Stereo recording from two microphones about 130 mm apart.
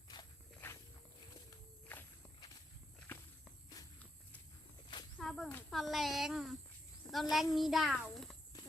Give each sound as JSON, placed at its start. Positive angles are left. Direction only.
{"t": 0.6, "sound": "walk", "side_deg": 15}
{"t": 5.2, "sound": "a sound", "side_deg": 5}
{"t": 5.7, "sound": "a child's voice", "side_deg": 0}